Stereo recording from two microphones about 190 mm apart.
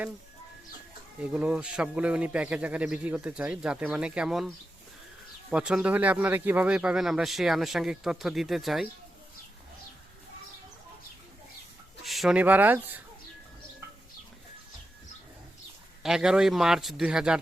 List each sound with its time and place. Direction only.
1.2 s speech: 5° right (ahead or behind)
12.0 s speech: centre (ahead or behind)
16.0 s speech: 5° right (ahead or behind)